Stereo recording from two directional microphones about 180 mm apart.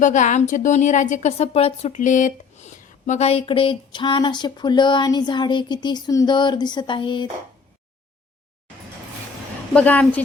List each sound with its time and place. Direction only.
0.0 s a woman's voice: 45° left (ahead or behind); by 7.3 s 25° left (ahead or behind)
9.7 s speech: 5° left (ahead or behind)